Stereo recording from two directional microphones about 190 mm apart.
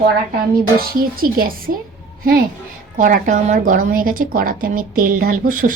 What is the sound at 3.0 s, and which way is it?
Speech, 45° right (ahead or behind).